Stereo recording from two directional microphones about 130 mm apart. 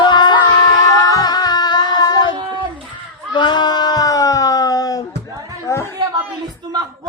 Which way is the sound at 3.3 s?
35° left (ahead or behind).